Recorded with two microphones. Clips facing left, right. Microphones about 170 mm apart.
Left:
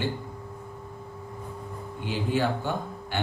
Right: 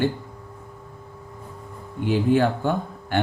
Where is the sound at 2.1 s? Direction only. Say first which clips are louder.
Right 7 dB; 55° right (ahead or behind).